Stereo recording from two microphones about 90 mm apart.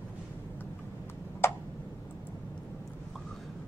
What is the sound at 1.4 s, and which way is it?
Tick, 30° left (ahead or behind).